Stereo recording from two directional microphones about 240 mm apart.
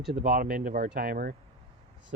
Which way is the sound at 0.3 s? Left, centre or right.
Right.